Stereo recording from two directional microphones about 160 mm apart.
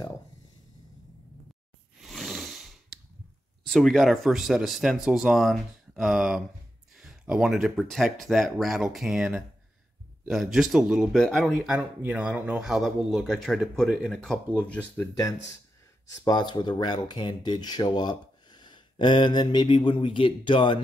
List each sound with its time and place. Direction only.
2.0 s a sound: centre (ahead or behind)
3.6 s speech: centre (ahead or behind)
16.1 s speech: 25° left (ahead or behind)